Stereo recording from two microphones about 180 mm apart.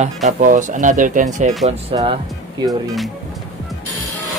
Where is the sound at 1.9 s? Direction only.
30° right (ahead or behind).